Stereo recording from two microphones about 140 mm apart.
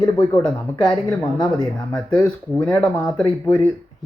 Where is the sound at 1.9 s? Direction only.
5° left (ahead or behind).